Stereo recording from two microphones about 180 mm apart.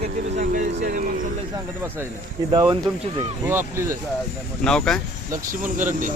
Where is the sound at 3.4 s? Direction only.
15° right (ahead or behind).